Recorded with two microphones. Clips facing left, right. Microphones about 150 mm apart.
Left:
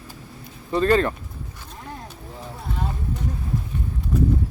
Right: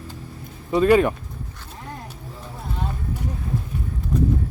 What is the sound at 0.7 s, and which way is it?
Speech, 10° right (ahead or behind).